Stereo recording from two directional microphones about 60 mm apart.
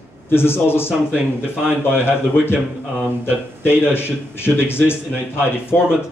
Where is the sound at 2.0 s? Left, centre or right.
Left.